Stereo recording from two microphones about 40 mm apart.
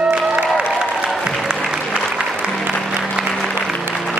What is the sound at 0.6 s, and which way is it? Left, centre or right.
Applause, right.